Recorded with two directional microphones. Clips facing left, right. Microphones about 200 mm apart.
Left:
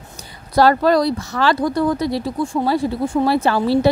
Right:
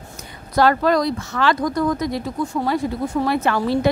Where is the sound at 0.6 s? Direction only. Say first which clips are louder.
Left 3 dB; 35° left (ahead or behind).